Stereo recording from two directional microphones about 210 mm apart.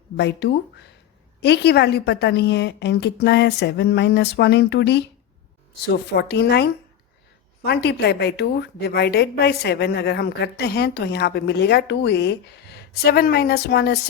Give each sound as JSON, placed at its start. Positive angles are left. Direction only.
{"t": 0.2, "sound": "a woman's voice", "side_deg": 55}